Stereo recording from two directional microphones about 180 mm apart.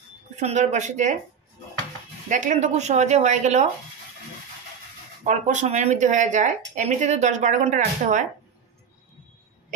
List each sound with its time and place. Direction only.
0.4 s speech: 40° right (ahead or behind)
2.2 s speech: 45° right (ahead or behind)
5.2 s speech: 40° right (ahead or behind)